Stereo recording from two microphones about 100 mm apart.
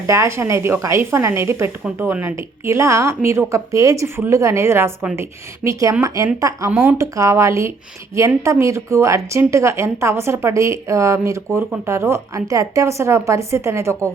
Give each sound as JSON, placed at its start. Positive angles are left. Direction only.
{"t": 0.1, "sound": "a woman's voice", "side_deg": -30}
{"t": 6.2, "sound": "a woman's voice", "side_deg": -35}
{"t": 6.7, "sound": "speech", "side_deg": -15}
{"t": 7.0, "sound": "a woman's voice", "side_deg": -30}